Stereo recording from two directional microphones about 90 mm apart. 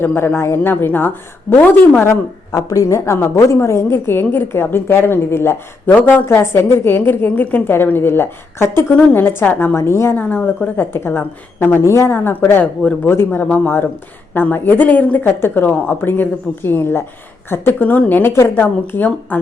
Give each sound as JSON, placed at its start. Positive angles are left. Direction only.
{"t": 0.0, "sound": "a woman's voice", "side_deg": 20}
{"t": 2.5, "sound": "a woman's voice", "side_deg": 40}
{"t": 10.2, "sound": "a woman's voice", "side_deg": 20}